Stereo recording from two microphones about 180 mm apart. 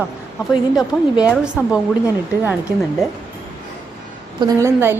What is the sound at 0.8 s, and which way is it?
Speech, 20° left (ahead or behind).